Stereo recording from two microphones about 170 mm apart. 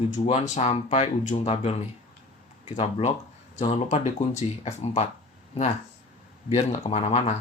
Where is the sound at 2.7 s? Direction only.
40° left (ahead or behind).